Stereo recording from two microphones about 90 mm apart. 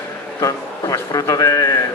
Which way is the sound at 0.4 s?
40° left (ahead or behind).